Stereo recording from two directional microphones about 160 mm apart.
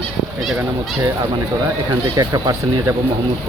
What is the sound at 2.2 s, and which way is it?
Speech, 20° right (ahead or behind).